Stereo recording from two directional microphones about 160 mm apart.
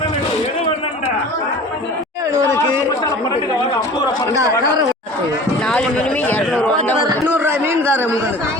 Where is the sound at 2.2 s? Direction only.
20° right (ahead or behind).